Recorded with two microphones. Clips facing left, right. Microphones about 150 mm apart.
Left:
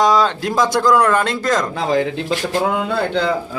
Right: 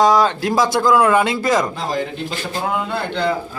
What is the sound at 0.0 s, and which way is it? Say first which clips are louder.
Speech: right 1 dB; centre (ahead or behind).